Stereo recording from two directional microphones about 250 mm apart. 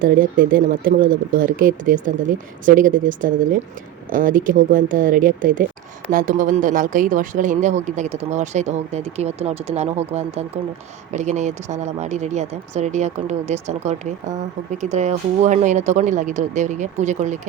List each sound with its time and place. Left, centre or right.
0.0 s speech: right